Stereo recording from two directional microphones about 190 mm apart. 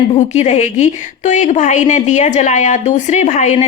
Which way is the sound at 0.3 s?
35° left (ahead or behind).